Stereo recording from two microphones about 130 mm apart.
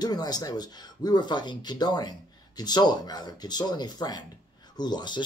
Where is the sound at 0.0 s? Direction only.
30° left (ahead or behind).